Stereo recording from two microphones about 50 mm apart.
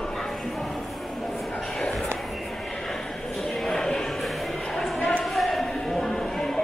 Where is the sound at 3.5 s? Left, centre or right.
Centre.